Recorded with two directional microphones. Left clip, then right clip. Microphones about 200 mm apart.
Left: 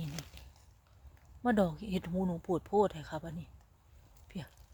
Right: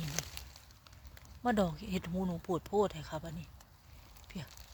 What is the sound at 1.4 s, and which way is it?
Speech, 25° left (ahead or behind).